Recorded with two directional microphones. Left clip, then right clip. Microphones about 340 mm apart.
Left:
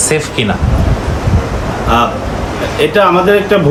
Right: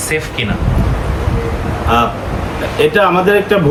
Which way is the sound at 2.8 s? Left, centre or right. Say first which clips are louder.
Left 1 dB; centre.